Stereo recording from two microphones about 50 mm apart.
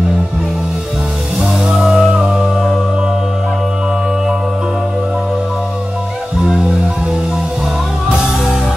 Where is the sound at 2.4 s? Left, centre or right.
Centre.